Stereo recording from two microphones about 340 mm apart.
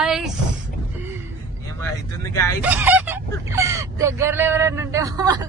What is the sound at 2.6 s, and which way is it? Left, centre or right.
Speech, centre.